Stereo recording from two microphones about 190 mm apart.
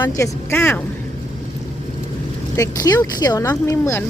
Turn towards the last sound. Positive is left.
turn(degrees=15)  # may be behind; listen again after turning